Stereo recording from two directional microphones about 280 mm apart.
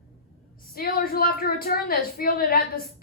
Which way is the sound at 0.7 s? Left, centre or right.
Left.